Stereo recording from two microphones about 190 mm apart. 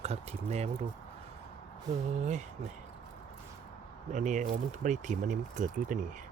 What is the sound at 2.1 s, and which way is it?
Speech, 40° right (ahead or behind).